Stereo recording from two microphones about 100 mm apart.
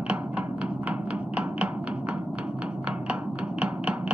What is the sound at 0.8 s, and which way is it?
Tap, 10° right (ahead or behind).